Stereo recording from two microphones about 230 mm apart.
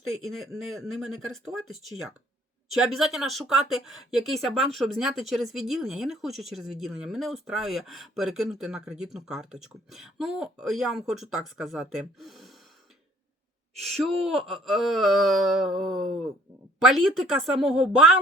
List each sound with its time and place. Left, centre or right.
0.1 s speech: centre
1.0 s speech: right
2.7 s speech: centre
13.8 s speech: centre